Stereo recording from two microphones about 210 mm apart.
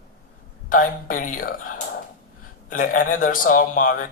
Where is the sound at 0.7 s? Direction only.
40° left (ahead or behind).